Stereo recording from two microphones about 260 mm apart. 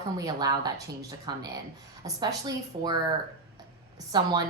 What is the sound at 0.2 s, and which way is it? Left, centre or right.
A woman's voice, centre.